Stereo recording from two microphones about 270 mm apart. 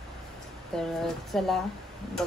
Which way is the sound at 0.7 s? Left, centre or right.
Centre.